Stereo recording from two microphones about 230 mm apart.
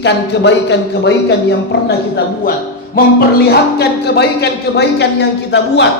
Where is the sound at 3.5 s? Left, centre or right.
Left.